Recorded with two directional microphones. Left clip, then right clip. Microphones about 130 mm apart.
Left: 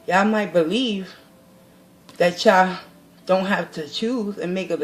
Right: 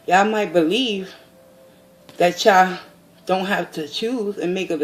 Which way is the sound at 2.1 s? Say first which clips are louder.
Right 2 dB; 45° right (ahead or behind).